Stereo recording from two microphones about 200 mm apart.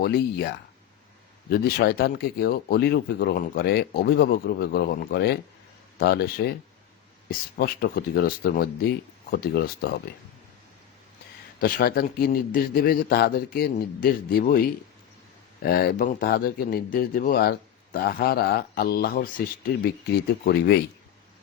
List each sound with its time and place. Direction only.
0.0 s speech: 50° left (ahead or behind)
11.6 s speech: 50° left (ahead or behind)
20.4 s speech: 55° left (ahead or behind)